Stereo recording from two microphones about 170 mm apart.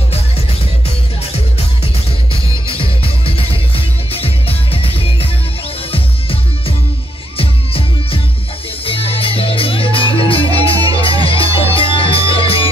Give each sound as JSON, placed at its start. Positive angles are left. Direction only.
{"t": 2.7, "sound": "music", "side_deg": 35}
{"t": 7.3, "sound": "music", "side_deg": 35}